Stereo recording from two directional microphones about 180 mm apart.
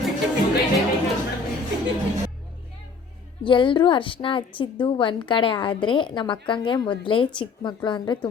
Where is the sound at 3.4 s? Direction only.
25° left (ahead or behind).